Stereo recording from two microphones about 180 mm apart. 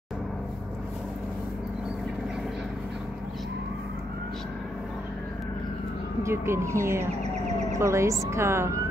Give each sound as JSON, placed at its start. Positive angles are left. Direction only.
{"t": 6.2, "sound": "speech", "side_deg": -15}